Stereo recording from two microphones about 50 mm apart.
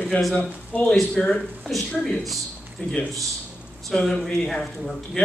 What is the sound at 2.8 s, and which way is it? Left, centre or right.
Speech, left.